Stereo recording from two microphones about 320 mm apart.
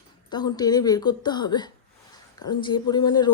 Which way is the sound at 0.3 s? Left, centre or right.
Centre.